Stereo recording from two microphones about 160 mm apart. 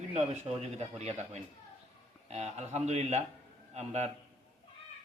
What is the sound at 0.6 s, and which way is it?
A man's voice, 45° right (ahead or behind).